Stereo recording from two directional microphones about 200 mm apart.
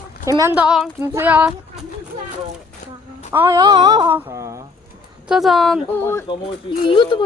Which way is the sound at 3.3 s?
15° right (ahead or behind).